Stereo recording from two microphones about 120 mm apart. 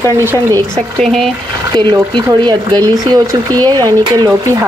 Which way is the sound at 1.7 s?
40° right (ahead or behind).